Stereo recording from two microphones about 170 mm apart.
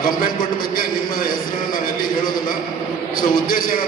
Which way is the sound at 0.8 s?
55° left (ahead or behind).